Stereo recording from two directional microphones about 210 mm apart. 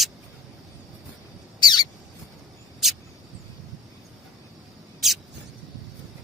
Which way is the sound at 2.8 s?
Centre (ahead or behind).